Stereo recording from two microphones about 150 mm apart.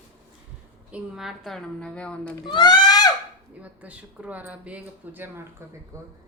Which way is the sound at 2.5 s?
30° left (ahead or behind).